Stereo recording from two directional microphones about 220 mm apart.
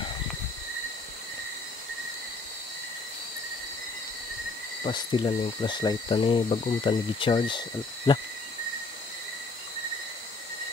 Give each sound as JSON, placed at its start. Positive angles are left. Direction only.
{"t": 4.8, "sound": "speech", "side_deg": 20}